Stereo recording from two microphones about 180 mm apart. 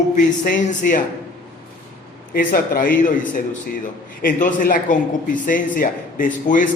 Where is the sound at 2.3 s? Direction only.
55° left (ahead or behind).